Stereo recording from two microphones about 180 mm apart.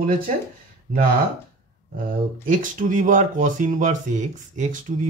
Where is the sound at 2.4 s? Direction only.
45° right (ahead or behind).